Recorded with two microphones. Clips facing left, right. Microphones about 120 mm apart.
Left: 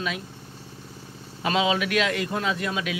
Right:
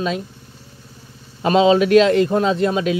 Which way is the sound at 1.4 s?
35° right (ahead or behind).